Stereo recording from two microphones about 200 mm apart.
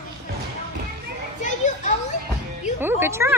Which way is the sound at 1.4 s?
35° left (ahead or behind).